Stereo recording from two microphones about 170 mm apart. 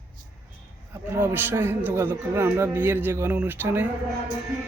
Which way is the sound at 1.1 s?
10° right (ahead or behind).